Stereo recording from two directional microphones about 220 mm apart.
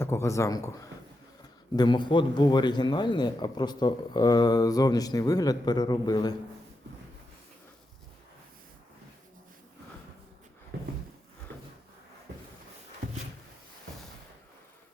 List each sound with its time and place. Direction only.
0.0 s speech: 10° left (ahead or behind)
1.7 s a man's voice: 20° left (ahead or behind)